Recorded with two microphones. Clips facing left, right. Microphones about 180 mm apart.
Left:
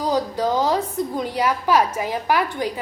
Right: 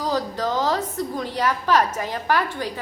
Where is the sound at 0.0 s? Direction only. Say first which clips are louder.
Left 3 dB; 15° left (ahead or behind).